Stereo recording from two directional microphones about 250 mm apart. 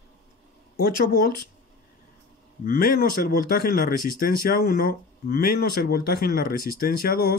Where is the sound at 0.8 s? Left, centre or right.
Left.